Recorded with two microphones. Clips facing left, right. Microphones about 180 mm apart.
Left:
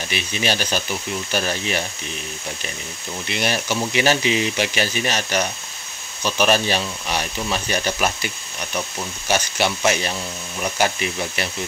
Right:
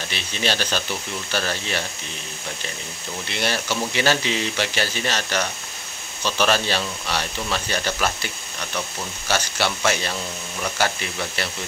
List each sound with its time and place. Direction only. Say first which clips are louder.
0.1 s speech: left 2 dB; 15° left (ahead or behind)
3.3 s speech: left 2 dB; 15° left (ahead or behind)